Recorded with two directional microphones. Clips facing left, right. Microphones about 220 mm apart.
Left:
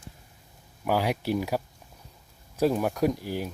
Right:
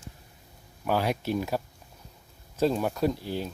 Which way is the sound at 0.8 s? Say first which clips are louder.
Left 1 dB; 10° left (ahead or behind).